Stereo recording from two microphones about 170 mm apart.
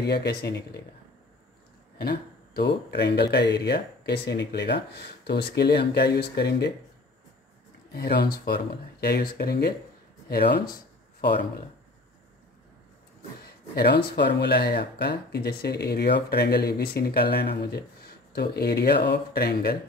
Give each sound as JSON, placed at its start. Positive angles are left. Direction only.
{"t": 0.0, "sound": "speech", "side_deg": 75}
{"t": 2.0, "sound": "speech", "side_deg": 65}
{"t": 7.9, "sound": "speech", "side_deg": 70}
{"t": 13.7, "sound": "speech", "side_deg": 75}